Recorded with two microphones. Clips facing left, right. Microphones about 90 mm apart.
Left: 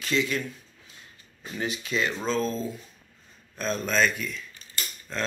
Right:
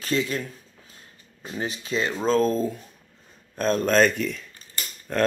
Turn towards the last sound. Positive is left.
turn(degrees=-55)  # may be behind; listen again after turning